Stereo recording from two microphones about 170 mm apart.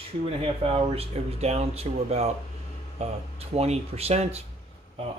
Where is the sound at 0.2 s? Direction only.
35° right (ahead or behind).